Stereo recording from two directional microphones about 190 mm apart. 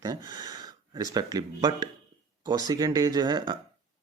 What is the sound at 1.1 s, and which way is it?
Speech, 20° right (ahead or behind).